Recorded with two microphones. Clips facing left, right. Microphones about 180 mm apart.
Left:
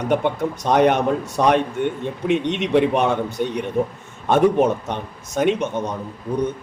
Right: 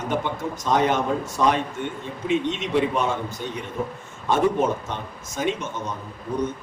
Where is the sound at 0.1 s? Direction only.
60° left (ahead or behind).